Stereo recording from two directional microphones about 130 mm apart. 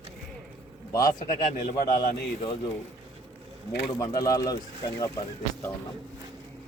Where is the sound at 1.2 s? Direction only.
90° left.